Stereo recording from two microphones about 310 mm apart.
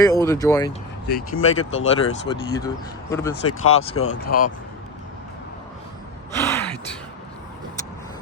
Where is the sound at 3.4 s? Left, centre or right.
Left.